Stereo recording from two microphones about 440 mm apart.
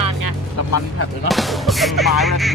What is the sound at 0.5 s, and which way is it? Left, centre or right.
Speech, left.